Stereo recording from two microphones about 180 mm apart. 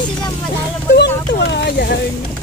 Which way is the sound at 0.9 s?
70° left (ahead or behind).